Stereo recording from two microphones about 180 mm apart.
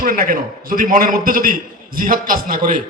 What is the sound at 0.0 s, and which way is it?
A man's voice, 50° right (ahead or behind).